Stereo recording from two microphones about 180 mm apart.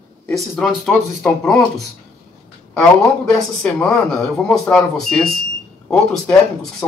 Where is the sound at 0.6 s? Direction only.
Centre (ahead or behind).